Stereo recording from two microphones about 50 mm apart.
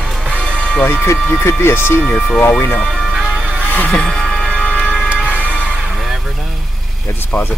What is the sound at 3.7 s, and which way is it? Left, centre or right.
Music, left.